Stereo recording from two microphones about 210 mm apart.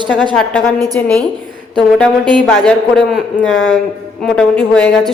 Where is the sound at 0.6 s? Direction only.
15° right (ahead or behind).